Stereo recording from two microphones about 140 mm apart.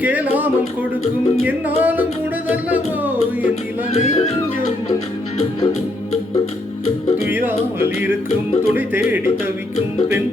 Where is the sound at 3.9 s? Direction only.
55° left (ahead or behind).